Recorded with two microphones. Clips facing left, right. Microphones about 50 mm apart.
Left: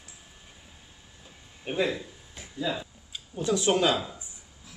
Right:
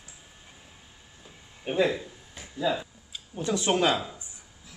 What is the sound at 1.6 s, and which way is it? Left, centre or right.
Speech, centre.